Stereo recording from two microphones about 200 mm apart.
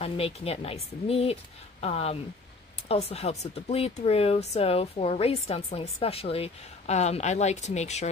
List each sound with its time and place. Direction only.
0.0 s speech: 30° left (ahead or behind)